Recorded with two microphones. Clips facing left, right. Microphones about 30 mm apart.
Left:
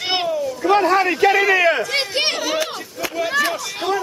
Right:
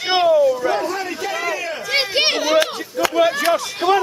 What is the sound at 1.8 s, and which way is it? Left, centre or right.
Speech, centre.